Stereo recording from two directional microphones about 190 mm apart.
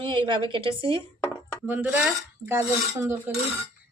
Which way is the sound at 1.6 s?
10° right (ahead or behind).